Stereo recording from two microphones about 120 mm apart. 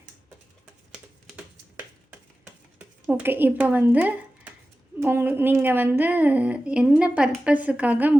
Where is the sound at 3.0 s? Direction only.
15° right (ahead or behind).